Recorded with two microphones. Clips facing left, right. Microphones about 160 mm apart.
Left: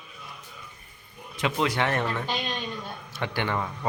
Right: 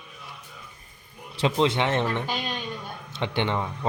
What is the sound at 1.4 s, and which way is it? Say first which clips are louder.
A man's voice: right 3 dB; 30° right (ahead or behind).